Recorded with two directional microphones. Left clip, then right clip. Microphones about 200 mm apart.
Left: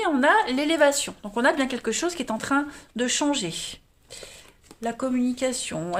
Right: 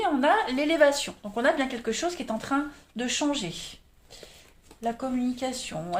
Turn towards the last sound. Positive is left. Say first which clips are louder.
# left 5 dB
turn(degrees=50)  # may be behind; listen again after turning